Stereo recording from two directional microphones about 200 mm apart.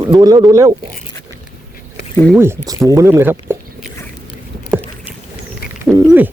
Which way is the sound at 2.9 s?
15° right (ahead or behind).